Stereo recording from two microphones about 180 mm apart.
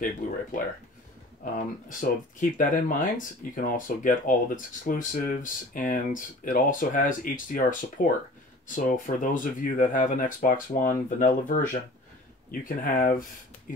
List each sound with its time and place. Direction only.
1.4 s speech: 45° left (ahead or behind)